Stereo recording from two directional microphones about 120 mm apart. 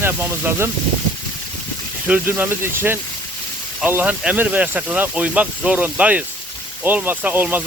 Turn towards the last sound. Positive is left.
turn(degrees=-15)  # may be behind; listen again after turning